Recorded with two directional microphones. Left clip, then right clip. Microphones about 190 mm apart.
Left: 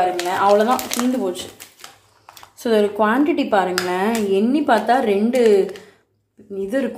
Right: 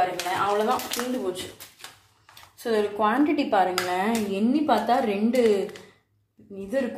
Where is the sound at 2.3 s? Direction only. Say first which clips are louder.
Left 7 dB; 35° left (ahead or behind).